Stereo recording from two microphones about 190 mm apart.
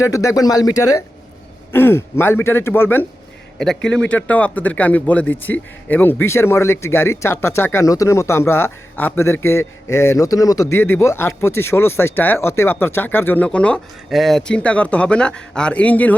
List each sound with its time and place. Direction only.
0.0 s speech: 15° left (ahead or behind)